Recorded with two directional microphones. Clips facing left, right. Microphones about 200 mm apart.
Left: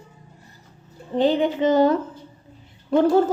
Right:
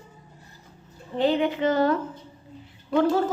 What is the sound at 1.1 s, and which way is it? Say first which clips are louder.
Speech: left 3 dB; 25° left (ahead or behind).